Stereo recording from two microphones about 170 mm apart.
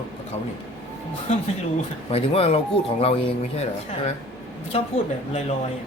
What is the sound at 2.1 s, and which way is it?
Speech, 35° left (ahead or behind).